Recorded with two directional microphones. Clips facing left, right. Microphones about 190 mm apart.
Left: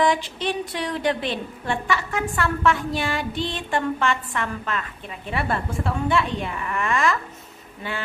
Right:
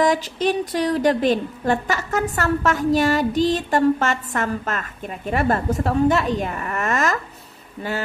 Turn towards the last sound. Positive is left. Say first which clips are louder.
# right 5 dB
turn(degrees=-40)  # may be behind; listen again after turning